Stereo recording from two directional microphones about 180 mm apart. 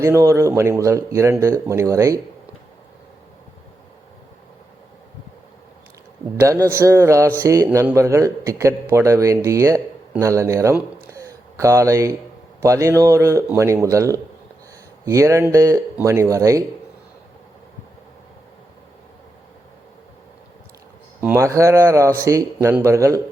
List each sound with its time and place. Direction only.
0.0 s a man's voice: 15° right (ahead or behind)
6.3 s a man's voice: 15° right (ahead or behind)
11.1 s a sound: 15° right (ahead or behind)
12.5 s a man's voice: 15° right (ahead or behind)
21.2 s a man's voice: 10° right (ahead or behind)